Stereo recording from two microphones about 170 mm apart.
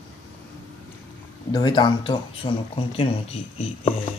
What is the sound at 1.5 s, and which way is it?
Speech, 25° left (ahead or behind).